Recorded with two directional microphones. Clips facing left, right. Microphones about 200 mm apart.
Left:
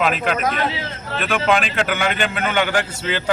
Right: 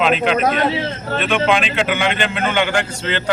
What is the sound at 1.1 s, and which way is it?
A man's voice, centre (ahead or behind).